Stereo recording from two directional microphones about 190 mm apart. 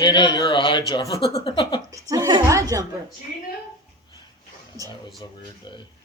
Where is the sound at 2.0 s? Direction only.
20° right (ahead or behind).